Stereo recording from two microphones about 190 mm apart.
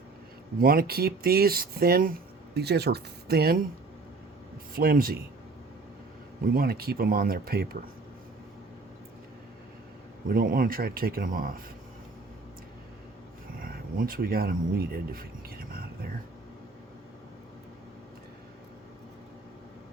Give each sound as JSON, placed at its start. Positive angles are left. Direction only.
{"t": 0.6, "sound": "speech", "side_deg": -50}
{"t": 4.7, "sound": "speech", "side_deg": -50}
{"t": 6.5, "sound": "speech", "side_deg": -50}
{"t": 10.2, "sound": "speech", "side_deg": -50}
{"t": 13.6, "sound": "a sound", "side_deg": -50}